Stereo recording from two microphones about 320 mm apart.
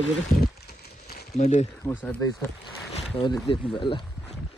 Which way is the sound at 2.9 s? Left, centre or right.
Centre.